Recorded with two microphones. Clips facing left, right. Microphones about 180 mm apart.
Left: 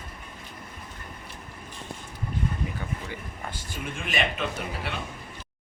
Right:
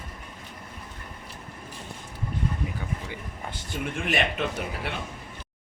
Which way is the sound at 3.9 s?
65° right (ahead or behind).